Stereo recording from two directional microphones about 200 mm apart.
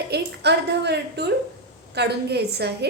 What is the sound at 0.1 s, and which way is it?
A woman's voice, 55° right (ahead or behind).